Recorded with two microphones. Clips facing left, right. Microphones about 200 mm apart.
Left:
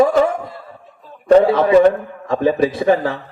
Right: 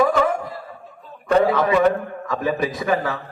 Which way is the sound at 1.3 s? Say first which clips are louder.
Left 6 dB; 30° left (ahead or behind).